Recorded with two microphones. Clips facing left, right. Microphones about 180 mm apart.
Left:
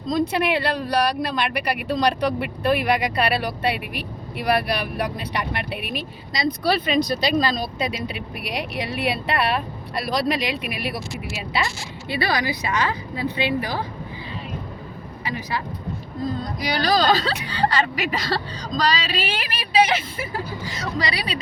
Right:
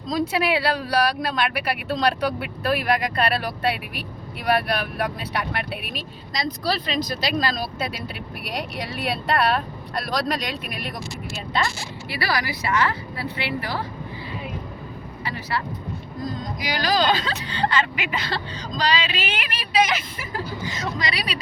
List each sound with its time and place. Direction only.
0.1 s speech: 5° right (ahead or behind)
12.0 s a woman's voice: 25° left (ahead or behind)
15.2 s speech: 15° left (ahead or behind)
16.2 s speech: 35° left (ahead or behind)